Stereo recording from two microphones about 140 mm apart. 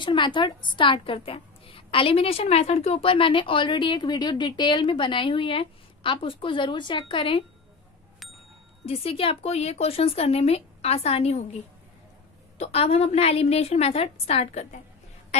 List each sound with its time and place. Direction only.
0.0 s a woman's voice: 35° left (ahead or behind)
8.8 s speech: 45° left (ahead or behind)
12.5 s speech: 45° left (ahead or behind)